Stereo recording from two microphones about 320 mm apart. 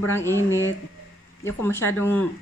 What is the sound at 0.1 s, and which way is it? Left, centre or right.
Speech, centre.